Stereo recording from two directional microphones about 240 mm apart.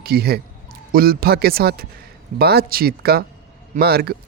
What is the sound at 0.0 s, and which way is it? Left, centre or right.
A man's voice, right.